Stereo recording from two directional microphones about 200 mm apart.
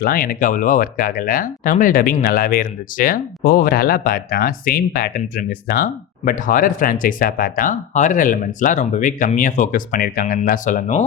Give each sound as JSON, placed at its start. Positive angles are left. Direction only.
{"t": 0.0, "sound": "speech", "side_deg": 50}